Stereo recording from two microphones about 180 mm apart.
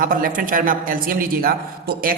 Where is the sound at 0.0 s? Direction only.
50° right (ahead or behind).